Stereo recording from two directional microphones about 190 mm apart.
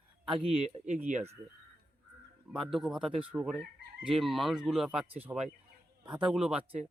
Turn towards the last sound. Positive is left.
turn(degrees=-5)  # may be behind; listen again after turning